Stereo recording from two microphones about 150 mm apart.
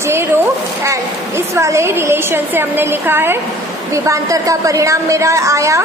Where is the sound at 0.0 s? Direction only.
15° right (ahead or behind).